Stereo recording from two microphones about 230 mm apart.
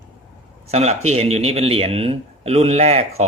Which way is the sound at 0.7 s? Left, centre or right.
Right.